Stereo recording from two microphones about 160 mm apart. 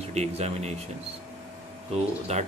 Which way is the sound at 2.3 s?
40° right (ahead or behind).